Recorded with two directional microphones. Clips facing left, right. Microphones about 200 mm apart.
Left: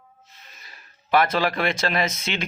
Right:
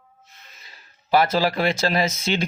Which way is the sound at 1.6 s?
30° right (ahead or behind).